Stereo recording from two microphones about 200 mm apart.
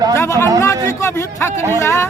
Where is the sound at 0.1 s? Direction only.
15° left (ahead or behind).